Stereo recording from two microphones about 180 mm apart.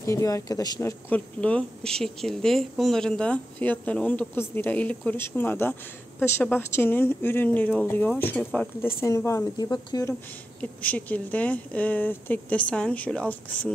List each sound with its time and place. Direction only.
0.0 s speech: 15° left (ahead or behind)
10.6 s speech: 10° left (ahead or behind)